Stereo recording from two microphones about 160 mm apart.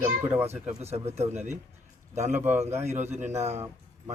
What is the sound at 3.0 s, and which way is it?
Speech, 45° right (ahead or behind).